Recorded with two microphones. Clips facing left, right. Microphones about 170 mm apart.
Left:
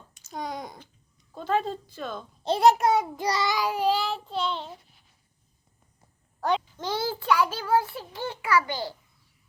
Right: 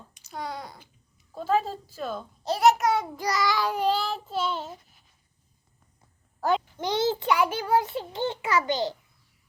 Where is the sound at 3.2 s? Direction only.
25° left (ahead or behind).